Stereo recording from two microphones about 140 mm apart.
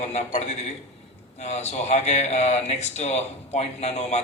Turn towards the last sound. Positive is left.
turn(degrees=50)  # may be behind; listen again after turning